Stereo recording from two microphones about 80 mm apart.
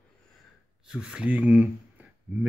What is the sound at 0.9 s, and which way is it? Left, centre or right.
Speech, centre.